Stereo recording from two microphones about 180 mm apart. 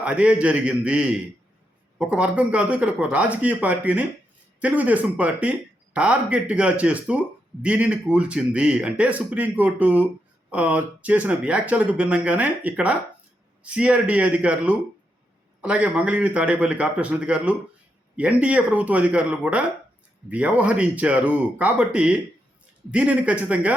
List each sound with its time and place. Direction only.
0.0 s speech: 5° right (ahead or behind)